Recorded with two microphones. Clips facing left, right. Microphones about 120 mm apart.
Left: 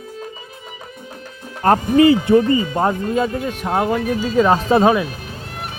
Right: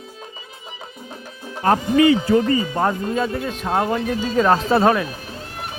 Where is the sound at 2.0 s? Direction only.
30° left (ahead or behind); by 4.6 s 5° left (ahead or behind).